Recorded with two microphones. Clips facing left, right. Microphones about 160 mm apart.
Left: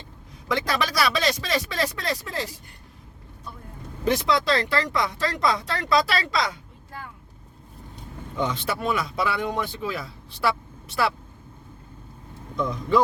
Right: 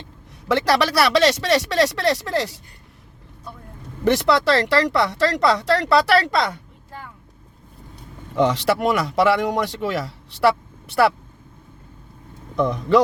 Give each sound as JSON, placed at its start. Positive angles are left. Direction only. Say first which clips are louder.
{"t": 0.4, "sound": "speech", "louder": "right 7 dB", "side_deg": -75}
{"t": 4.0, "sound": "speech", "louder": "right 5 dB", "side_deg": -75}
{"t": 8.4, "sound": "speech", "louder": "right 9 dB", "side_deg": -75}
{"t": 12.5, "sound": "speech", "louder": "right 6 dB", "side_deg": -70}